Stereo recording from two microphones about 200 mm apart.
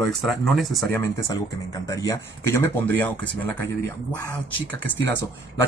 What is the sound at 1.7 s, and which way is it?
Speech, 15° left (ahead or behind).